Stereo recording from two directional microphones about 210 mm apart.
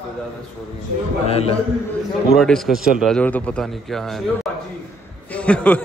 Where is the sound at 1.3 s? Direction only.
30° left (ahead or behind).